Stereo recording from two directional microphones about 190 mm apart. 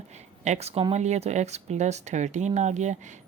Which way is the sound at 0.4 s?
35° right (ahead or behind).